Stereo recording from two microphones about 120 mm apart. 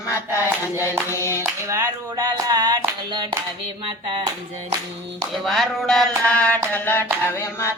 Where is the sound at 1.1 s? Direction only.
20° left (ahead or behind).